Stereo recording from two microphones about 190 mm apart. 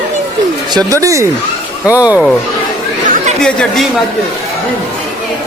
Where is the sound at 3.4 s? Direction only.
5° left (ahead or behind).